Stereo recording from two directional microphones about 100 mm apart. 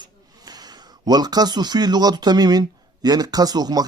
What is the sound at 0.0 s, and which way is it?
Speech, 40° right (ahead or behind).